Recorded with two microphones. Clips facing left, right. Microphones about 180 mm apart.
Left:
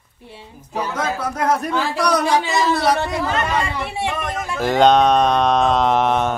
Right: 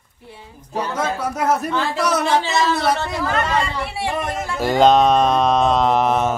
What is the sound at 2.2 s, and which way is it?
Speech, 10° left (ahead or behind).